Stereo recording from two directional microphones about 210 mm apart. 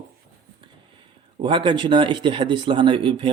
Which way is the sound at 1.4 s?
20° right (ahead or behind).